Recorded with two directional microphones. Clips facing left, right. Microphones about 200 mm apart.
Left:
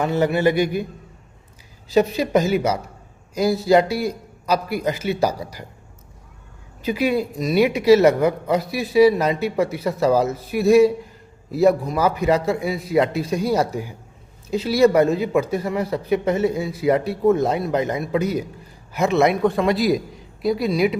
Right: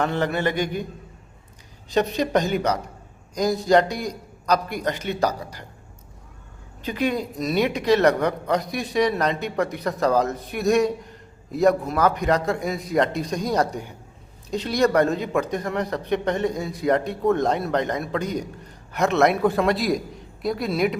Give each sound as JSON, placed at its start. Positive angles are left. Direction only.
{"t": 0.0, "sound": "a man's voice", "side_deg": 10}
{"t": 1.9, "sound": "a man's voice", "side_deg": 5}
{"t": 6.8, "sound": "speech", "side_deg": 10}